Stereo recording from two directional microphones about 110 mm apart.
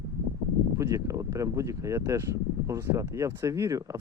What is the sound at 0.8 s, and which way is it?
Speech, 30° right (ahead or behind).